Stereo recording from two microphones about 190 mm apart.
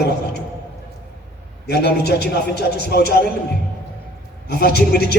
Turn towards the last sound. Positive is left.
turn(degrees=60)  # may be behind; listen again after turning